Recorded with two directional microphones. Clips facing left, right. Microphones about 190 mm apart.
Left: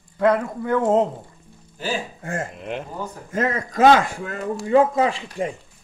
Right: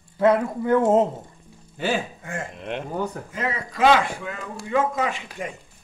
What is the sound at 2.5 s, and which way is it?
Speech, centre (ahead or behind).